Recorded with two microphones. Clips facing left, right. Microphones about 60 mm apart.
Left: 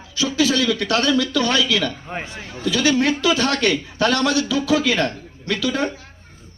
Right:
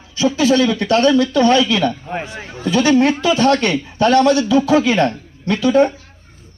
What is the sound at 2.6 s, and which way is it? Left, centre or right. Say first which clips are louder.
A man's voice: right 5 dB; right.